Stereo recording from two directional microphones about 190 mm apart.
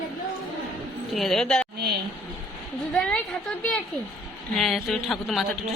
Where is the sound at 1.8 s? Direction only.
60° right (ahead or behind).